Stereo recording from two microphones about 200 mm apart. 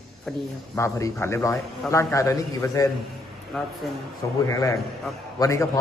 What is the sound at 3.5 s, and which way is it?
Speech, centre (ahead or behind).